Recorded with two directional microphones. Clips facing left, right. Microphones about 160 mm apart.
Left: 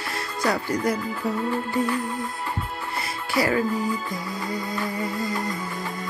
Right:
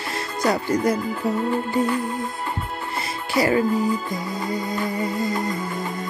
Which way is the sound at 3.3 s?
20° right (ahead or behind).